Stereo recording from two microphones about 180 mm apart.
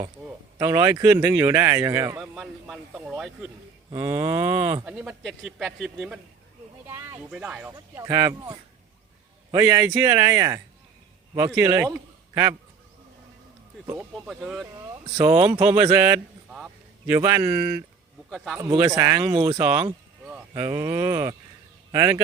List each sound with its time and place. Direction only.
0.2 s speech: 15° right (ahead or behind)
2.2 s speech: 5° right (ahead or behind)
3.9 s cattle: 20° right (ahead or behind)
4.9 s speech: 5° right (ahead or behind)
7.9 s speech: 15° right (ahead or behind)
14.1 s speech: centre (ahead or behind)
15.2 s cattle: 25° right (ahead or behind)
15.6 s speech: 15° right (ahead or behind)
16.5 s a sound: 5° right (ahead or behind)
18.3 s speech: centre (ahead or behind)
18.9 s speech: 15° right (ahead or behind)
19.3 s cattle: 25° right (ahead or behind)
21.9 s speech: 15° right (ahead or behind)